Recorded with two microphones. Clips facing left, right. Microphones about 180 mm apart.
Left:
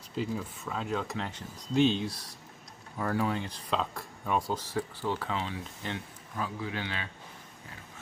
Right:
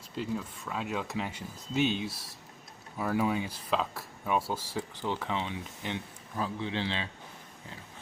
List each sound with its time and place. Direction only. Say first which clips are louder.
0.2 s a man's voice: left 1 dB; centre (ahead or behind); by 7.1 s 30° right (ahead or behind)